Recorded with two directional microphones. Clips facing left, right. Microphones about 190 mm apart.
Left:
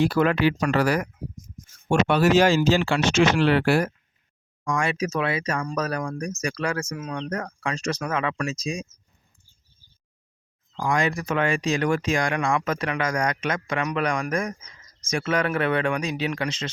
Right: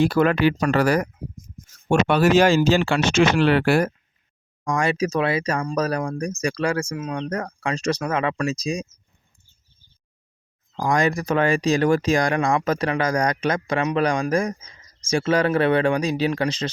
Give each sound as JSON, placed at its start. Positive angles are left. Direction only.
{"t": 0.0, "sound": "speech", "side_deg": -50}
{"t": 1.9, "sound": "speech", "side_deg": -55}
{"t": 4.6, "sound": "speech", "side_deg": -40}
{"t": 10.8, "sound": "speech", "side_deg": -40}